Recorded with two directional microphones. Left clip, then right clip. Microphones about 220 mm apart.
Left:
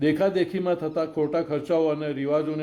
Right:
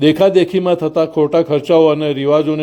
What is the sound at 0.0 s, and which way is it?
A man's voice, 35° right (ahead or behind).